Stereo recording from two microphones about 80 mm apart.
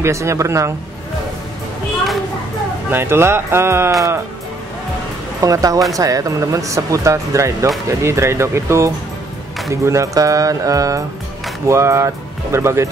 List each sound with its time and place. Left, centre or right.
0.0 s speech: right
2.9 s speech: right
5.4 s speech: right